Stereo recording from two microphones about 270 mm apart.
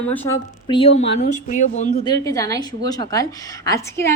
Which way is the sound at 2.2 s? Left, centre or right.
Centre.